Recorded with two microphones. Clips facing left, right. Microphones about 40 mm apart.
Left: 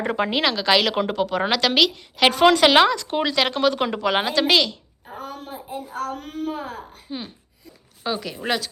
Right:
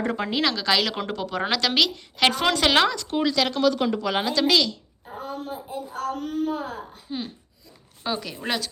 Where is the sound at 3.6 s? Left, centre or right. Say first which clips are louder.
Left 1 dB; left.